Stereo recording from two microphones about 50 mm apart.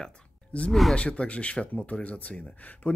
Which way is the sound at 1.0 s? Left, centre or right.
Left.